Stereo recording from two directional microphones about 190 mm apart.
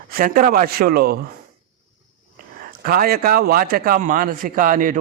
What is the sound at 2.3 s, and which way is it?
A man's voice, 50° right (ahead or behind).